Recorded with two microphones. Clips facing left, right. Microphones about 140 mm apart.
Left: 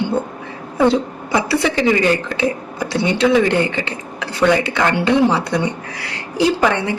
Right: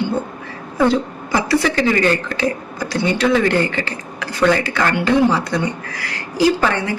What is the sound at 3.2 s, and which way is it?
A woman's voice, 15° left (ahead or behind).